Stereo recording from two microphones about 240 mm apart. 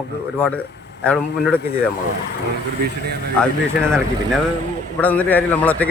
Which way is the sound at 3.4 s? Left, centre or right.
Centre.